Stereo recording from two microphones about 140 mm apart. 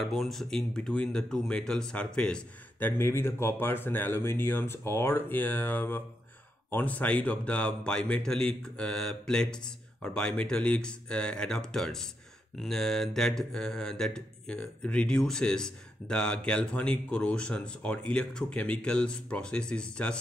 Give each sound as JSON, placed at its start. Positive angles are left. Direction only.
{"t": 0.0, "sound": "speech", "side_deg": 0}